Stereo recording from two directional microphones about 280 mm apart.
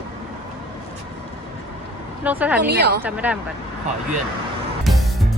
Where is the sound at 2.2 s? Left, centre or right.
Centre.